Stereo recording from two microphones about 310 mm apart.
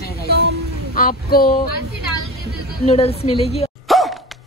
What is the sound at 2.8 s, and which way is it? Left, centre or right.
Speech, centre.